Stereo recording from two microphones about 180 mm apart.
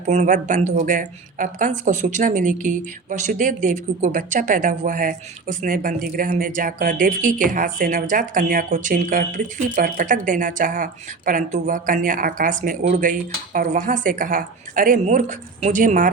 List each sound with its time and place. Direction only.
0.1 s a woman's voice: 40° right (ahead or behind)